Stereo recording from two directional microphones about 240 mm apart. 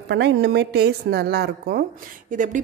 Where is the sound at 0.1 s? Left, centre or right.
Right.